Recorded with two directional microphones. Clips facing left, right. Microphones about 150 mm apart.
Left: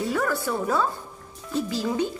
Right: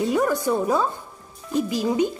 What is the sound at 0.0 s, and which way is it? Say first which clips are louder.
A woman's voice: right 4 dB; 20° right (ahead or behind).